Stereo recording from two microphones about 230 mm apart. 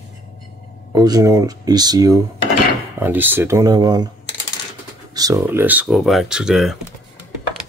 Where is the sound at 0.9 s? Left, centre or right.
Centre.